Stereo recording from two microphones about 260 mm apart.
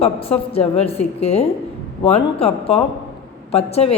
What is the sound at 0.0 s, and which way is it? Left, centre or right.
A woman's voice, left.